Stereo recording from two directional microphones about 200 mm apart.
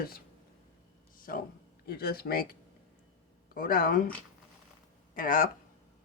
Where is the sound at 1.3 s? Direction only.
45° left (ahead or behind).